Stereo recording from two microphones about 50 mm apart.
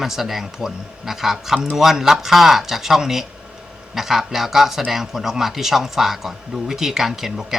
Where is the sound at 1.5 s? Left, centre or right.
Right.